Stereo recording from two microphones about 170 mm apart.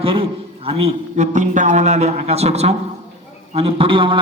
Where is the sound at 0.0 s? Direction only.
30° right (ahead or behind).